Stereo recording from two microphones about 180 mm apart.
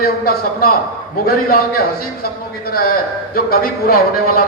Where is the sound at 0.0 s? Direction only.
55° left (ahead or behind).